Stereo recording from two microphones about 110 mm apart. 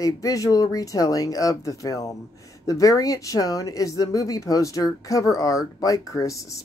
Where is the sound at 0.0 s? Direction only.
30° left (ahead or behind).